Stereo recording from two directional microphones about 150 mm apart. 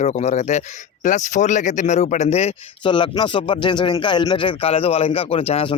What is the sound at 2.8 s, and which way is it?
Speech, 30° left (ahead or behind).